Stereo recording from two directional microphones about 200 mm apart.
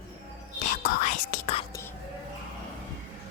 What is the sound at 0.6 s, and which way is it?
Whispering, 40° left (ahead or behind).